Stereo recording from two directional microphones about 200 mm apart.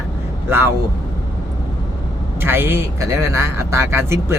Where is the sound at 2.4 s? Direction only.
10° right (ahead or behind).